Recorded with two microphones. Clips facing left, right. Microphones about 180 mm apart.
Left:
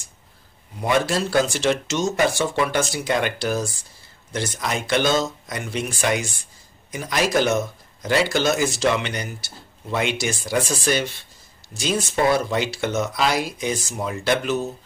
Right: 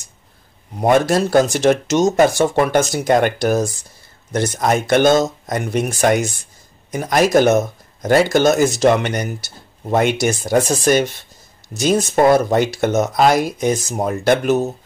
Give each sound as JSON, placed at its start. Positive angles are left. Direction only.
{"t": 0.7, "sound": "speech", "side_deg": -45}